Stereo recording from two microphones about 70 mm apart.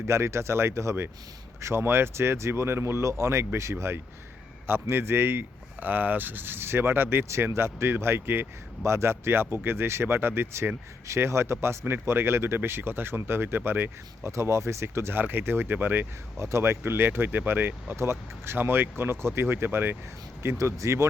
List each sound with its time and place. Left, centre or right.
0.1 s speech: right
16.4 s speech: right
17.9 s speech: right